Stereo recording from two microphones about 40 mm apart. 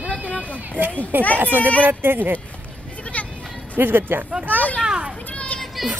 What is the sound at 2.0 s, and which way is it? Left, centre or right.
Speech, right.